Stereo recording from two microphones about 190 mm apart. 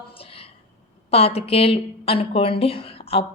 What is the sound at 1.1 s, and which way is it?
A woman's voice, 30° left (ahead or behind).